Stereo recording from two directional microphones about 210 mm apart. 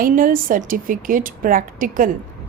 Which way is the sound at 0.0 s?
40° right (ahead or behind).